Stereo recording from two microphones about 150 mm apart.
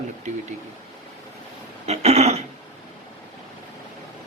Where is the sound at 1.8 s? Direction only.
45° right (ahead or behind).